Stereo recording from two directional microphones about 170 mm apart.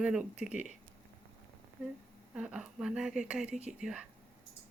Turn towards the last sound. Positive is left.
turn(degrees=-5)  # may be behind; listen again after turning